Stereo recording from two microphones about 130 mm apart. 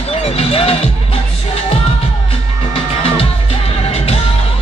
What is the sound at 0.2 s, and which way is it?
Music, 45° left (ahead or behind).